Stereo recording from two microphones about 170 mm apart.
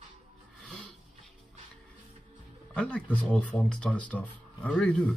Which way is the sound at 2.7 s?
5° left (ahead or behind).